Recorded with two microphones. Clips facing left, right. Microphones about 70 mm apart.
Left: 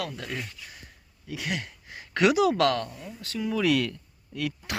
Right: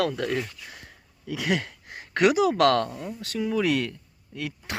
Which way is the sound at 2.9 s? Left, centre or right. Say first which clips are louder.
Right 5 dB; right.